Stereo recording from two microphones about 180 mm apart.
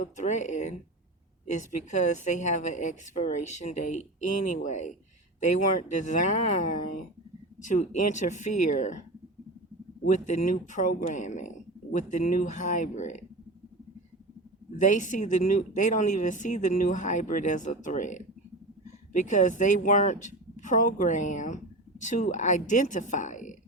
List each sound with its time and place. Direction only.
0.0 s speech: 45° left (ahead or behind)
10.1 s speech: 45° left (ahead or behind)
14.8 s speech: 45° left (ahead or behind)